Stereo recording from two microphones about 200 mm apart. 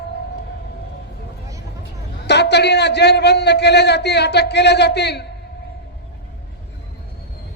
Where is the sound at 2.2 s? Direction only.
55° left (ahead or behind).